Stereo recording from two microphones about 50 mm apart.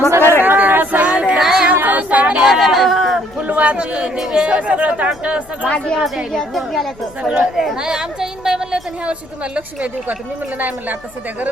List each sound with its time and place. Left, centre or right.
0.4 s a sound: right
1.4 s music: centre
1.7 s a sound: right
2.5 s chatter: centre
3.4 s a sound: right
3.8 s speech: centre
5.6 s speech: left
6.3 s speech: centre
7.2 s speech: right
7.5 s a woman's voice: centre; by 10.9 s right